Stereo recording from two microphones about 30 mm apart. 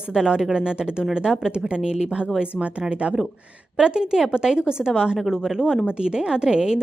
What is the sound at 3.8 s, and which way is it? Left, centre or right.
Speech, right.